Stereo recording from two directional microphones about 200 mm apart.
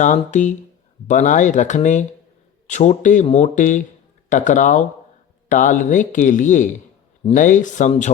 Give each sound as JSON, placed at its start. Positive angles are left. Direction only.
{"t": 0.0, "sound": "speech", "side_deg": 35}